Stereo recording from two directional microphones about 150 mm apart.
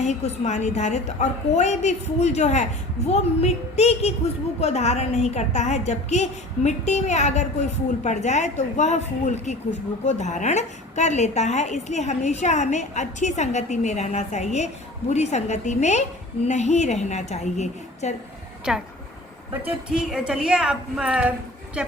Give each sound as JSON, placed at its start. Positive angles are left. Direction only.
{"t": 0.0, "sound": "a woman's voice", "side_deg": 50}
{"t": 18.7, "sound": "speech", "side_deg": -5}
{"t": 19.9, "sound": "a woman's voice", "side_deg": -5}